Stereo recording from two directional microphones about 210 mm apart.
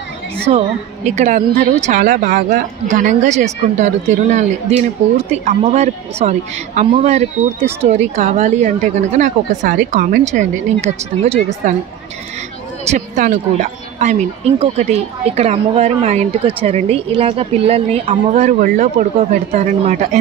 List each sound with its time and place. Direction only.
0.5 s a woman's voice: 30° right (ahead or behind)
12.9 s a woman's voice: 35° right (ahead or behind)